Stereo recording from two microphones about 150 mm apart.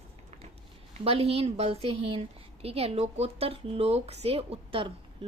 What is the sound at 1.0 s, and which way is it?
A woman's voice, 40° right (ahead or behind).